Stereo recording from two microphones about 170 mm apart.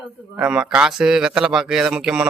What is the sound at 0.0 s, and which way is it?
A man's voice, 5° right (ahead or behind).